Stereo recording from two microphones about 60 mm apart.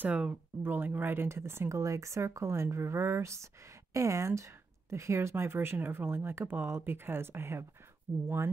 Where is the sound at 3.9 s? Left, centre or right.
Right.